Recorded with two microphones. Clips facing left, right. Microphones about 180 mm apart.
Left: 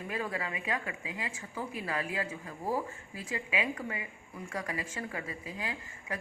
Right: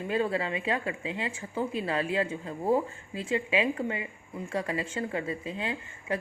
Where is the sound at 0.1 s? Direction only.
30° right (ahead or behind).